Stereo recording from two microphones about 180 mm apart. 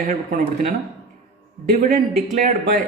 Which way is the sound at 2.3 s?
45° right (ahead or behind).